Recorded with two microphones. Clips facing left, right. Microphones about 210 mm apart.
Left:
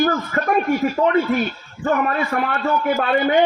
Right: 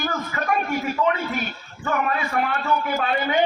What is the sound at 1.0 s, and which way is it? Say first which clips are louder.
A man's voice: left 6 dB; 40° left (ahead or behind).